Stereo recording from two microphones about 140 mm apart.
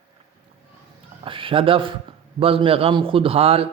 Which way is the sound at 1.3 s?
40° right (ahead or behind).